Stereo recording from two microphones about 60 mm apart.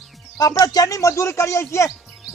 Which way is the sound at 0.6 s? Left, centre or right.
Left.